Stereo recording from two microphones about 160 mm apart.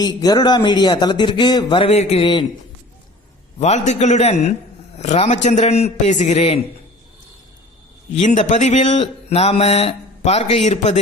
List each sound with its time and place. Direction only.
0.0 s speech: 25° left (ahead or behind)
3.6 s speech: 45° left (ahead or behind)
8.1 s speech: 45° left (ahead or behind)